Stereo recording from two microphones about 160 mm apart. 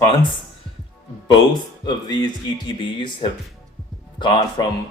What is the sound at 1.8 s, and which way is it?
Speech, 25° left (ahead or behind).